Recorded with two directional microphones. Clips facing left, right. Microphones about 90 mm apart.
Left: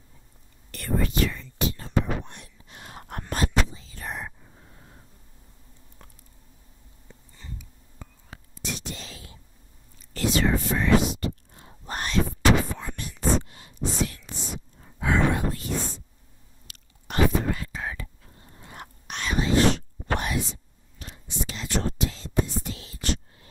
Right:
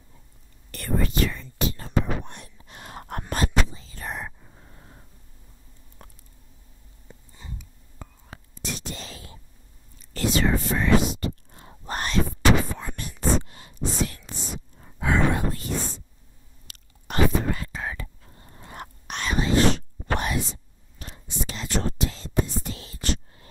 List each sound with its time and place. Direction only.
0.7 s speech: 40° right (ahead or behind)
2.2 s whispering: 45° right (ahead or behind)
7.1 s a sound: 15° right (ahead or behind)
8.0 s whispering: 40° right (ahead or behind)
11.9 s a sound: 40° right (ahead or behind)
16.6 s whispering: 40° right (ahead or behind)